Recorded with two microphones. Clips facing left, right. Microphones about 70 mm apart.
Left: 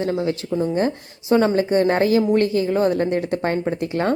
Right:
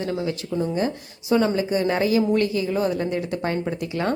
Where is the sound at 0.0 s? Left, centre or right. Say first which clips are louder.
Left 4 dB; left.